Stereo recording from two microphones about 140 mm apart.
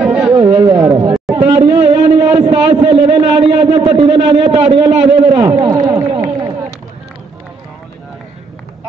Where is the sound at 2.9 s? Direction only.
45° right (ahead or behind).